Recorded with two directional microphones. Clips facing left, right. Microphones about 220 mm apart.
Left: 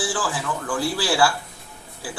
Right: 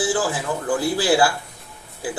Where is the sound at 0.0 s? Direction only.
20° right (ahead or behind).